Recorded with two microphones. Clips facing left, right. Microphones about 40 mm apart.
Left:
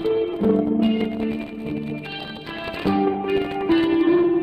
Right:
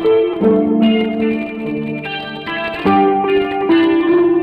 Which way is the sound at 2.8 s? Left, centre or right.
Right.